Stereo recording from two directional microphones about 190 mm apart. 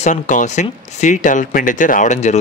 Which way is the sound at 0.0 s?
40° left (ahead or behind).